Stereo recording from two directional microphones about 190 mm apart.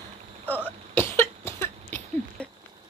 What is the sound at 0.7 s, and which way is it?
Cough, 10° left (ahead or behind).